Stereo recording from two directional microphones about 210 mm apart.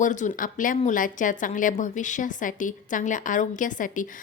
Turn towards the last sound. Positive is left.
turn(degrees=40)  # may be behind; listen again after turning